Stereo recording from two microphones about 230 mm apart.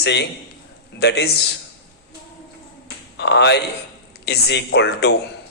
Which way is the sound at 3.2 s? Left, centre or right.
Left.